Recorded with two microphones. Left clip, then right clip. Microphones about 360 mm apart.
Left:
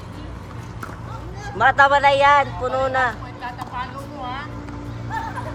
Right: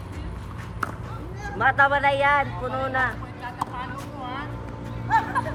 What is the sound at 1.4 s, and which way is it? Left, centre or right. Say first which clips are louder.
Speech: left 5 dB; centre.